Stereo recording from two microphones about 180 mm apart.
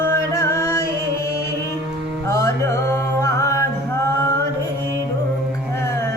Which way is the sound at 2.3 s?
15° left (ahead or behind).